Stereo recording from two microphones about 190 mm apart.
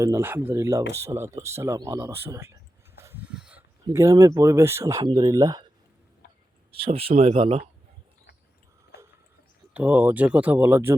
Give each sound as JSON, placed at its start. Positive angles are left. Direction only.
{"t": 0.0, "sound": "speech", "side_deg": -15}
{"t": 3.0, "sound": "a sound", "side_deg": -10}
{"t": 3.9, "sound": "speech", "side_deg": -15}
{"t": 6.7, "sound": "speech", "side_deg": -30}
{"t": 9.7, "sound": "speech", "side_deg": -10}